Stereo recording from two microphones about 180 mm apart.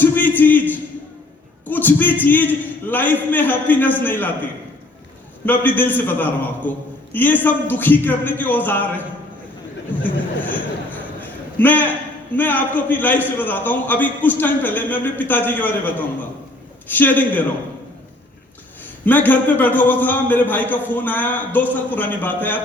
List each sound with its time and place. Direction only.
0.0 s a sound: 10° left (ahead or behind)
1.6 s a man's voice: 10° left (ahead or behind)
5.5 s a man's voice: 10° left (ahead or behind)
11.2 s a man's voice: 10° left (ahead or behind)
19.0 s a man's voice: 10° left (ahead or behind)